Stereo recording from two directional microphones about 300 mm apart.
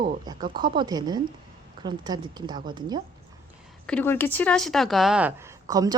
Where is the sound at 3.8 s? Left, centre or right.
Centre.